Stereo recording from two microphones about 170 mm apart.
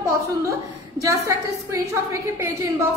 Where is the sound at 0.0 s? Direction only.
15° right (ahead or behind).